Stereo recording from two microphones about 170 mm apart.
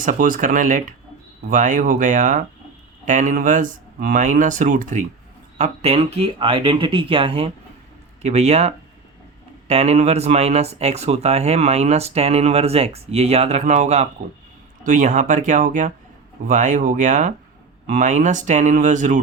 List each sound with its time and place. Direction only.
0.0 s speech: 50° right (ahead or behind)